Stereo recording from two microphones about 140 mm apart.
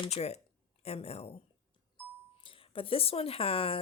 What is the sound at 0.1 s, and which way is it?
Speech, 50° left (ahead or behind).